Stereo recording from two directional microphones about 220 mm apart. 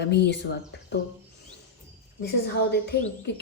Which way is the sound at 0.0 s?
50° left (ahead or behind).